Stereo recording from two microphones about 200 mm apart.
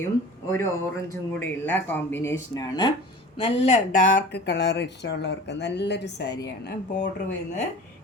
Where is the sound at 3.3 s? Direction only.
30° left (ahead or behind).